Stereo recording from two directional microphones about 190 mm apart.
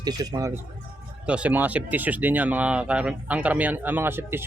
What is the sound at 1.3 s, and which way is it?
Speech, 5° right (ahead or behind).